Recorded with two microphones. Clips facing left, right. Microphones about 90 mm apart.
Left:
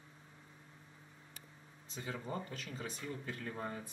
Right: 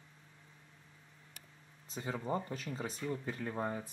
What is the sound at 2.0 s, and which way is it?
Speech, 25° right (ahead or behind).